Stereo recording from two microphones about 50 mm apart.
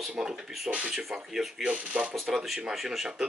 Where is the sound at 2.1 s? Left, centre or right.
Centre.